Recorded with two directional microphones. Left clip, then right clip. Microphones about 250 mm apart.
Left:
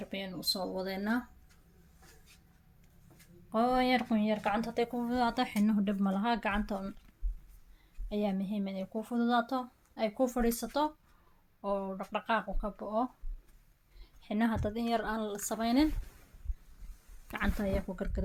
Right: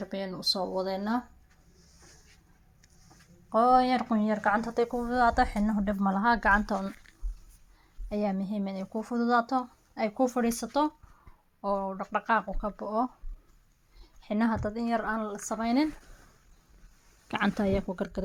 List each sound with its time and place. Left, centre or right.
0.1 s speech: centre
0.9 s speech: centre
3.5 s speech: centre
8.1 s speech: centre
14.0 s a sound: centre
14.6 s speech: centre
17.2 s speech: right